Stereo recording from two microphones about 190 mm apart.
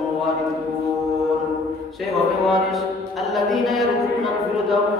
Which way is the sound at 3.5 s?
Centre (ahead or behind).